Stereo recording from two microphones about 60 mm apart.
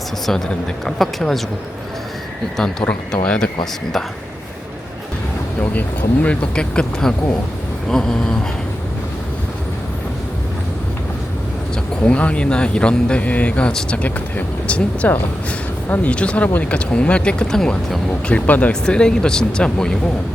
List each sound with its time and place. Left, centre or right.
0.9 s a woman's voice: centre
3.1 s speech: centre
5.5 s speech: left; by 8.4 s centre
12.0 s speech: left